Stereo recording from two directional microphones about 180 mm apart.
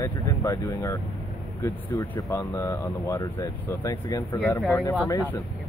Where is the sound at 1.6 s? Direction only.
15° left (ahead or behind).